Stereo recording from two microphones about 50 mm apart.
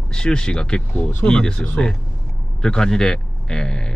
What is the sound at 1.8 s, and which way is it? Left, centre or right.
Speech, left.